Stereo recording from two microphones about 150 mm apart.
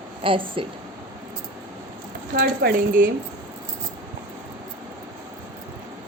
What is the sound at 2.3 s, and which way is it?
Speech, 90° right.